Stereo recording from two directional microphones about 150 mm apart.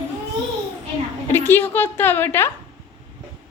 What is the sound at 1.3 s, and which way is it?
A woman's voice, 15° left (ahead or behind).